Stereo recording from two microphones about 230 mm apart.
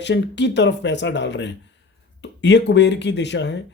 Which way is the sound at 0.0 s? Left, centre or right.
Left.